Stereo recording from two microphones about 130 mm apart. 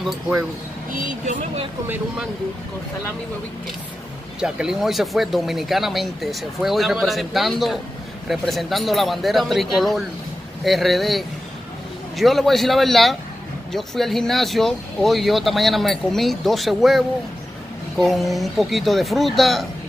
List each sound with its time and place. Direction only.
0.9 s speech: 90° right
4.4 s speech: 5° right (ahead or behind)